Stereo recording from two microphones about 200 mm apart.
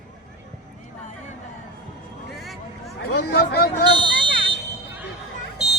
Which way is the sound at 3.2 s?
55° left (ahead or behind).